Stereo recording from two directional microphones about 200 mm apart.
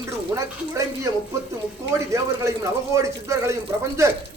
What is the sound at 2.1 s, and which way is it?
A man's voice, 15° right (ahead or behind).